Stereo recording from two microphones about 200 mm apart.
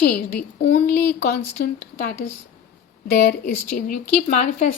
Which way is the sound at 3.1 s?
50° left (ahead or behind).